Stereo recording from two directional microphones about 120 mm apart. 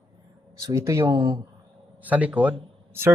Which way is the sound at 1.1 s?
40° right (ahead or behind).